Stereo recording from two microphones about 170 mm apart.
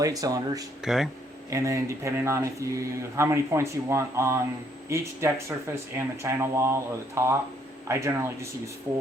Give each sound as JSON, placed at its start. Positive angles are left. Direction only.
{"t": 0.0, "sound": "speech", "side_deg": -20}
{"t": 0.9, "sound": "speech", "side_deg": 0}
{"t": 1.5, "sound": "speech", "side_deg": -20}